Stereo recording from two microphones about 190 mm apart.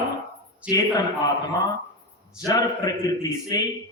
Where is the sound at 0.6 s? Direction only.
5° right (ahead or behind).